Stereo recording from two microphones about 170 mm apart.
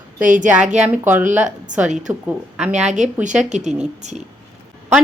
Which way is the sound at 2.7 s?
45° right (ahead or behind).